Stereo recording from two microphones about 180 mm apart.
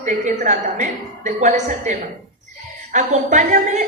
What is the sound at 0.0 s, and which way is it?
A woman's voice, 45° right (ahead or behind).